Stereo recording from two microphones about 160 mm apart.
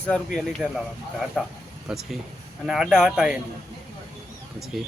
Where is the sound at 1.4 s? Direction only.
Centre (ahead or behind).